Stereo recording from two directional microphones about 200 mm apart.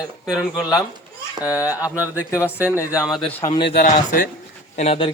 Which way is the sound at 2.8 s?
15° left (ahead or behind).